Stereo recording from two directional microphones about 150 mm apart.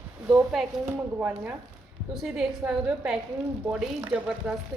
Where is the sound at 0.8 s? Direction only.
15° right (ahead or behind).